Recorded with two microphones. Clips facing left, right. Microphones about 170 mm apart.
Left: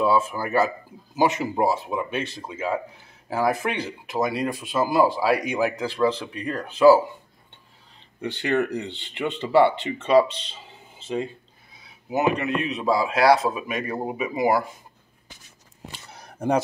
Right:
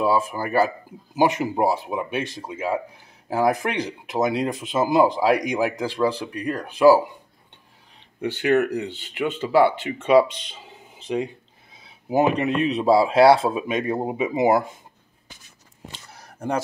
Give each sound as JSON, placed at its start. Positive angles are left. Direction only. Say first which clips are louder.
{"t": 0.0, "sound": "speech", "louder": "even", "side_deg": -10}
{"t": 8.2, "sound": "speech", "louder": "right 4 dB", "side_deg": -10}
{"t": 12.1, "sound": "speech", "louder": "right 3 dB", "side_deg": -30}
{"t": 15.9, "sound": "a sound", "louder": "left 1 dB", "side_deg": 10}